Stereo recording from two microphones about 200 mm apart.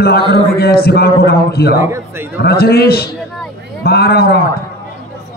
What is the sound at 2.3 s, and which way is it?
Speech, 50° left (ahead or behind).